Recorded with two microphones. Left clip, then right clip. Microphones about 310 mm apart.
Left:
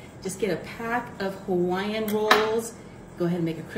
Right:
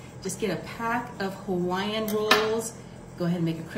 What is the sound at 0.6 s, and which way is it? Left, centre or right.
Speech, right.